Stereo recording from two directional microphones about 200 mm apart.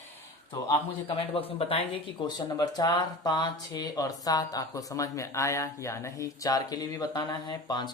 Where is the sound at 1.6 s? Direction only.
30° left (ahead or behind).